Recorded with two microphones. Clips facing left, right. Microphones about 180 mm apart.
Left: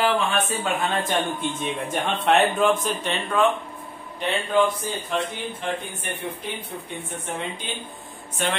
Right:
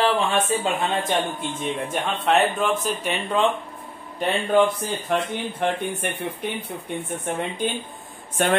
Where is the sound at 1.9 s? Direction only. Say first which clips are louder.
Left 1 dB; centre (ahead or behind).